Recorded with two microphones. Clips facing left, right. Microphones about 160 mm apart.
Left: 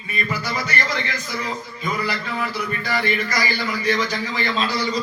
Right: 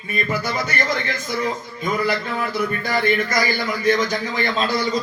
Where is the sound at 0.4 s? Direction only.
50° right (ahead or behind).